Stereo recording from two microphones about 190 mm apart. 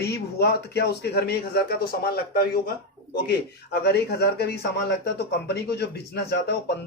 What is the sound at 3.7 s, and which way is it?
A man's voice, 55° left (ahead or behind).